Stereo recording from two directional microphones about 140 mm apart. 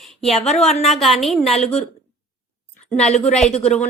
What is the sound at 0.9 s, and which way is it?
Speech, centre (ahead or behind).